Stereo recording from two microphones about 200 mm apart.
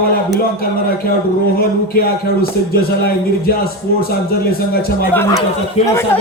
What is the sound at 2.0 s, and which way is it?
A man's voice, 50° left (ahead or behind).